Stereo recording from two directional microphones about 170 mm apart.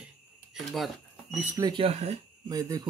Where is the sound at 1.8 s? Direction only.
40° right (ahead or behind).